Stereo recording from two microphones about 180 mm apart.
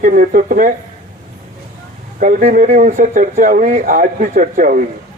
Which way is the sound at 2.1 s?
45° right (ahead or behind).